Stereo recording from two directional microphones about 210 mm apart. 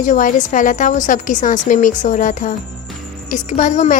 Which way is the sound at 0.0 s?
35° left (ahead or behind).